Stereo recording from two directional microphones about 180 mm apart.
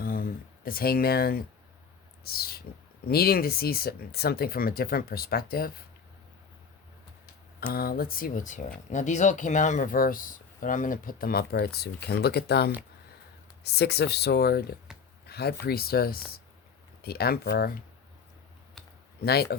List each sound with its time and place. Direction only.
0.0 s a sound: 55° left (ahead or behind)
2.2 s speech: 55° left (ahead or behind)
7.7 s speech: 55° left (ahead or behind)
19.2 s speech: 60° left (ahead or behind)